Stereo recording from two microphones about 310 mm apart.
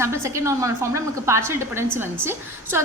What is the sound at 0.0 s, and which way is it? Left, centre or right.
A woman's voice, centre.